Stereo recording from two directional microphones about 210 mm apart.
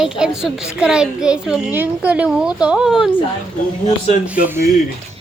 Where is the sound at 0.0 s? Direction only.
5° right (ahead or behind).